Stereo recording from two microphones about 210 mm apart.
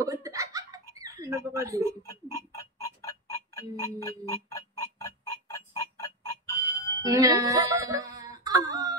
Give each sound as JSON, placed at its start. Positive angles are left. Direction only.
{"t": 0.0, "sound": "giggle", "side_deg": -15}
{"t": 1.0, "sound": "speech", "side_deg": -15}
{"t": 1.9, "sound": "music", "side_deg": 15}
{"t": 7.0, "sound": "speech", "side_deg": -15}